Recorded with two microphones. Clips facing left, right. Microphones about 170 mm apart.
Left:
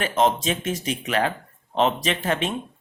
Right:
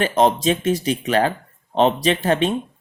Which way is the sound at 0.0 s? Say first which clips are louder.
Right 4 dB; 35° right (ahead or behind).